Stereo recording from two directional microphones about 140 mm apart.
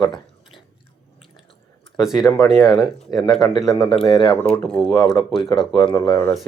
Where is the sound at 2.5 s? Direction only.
25° left (ahead or behind).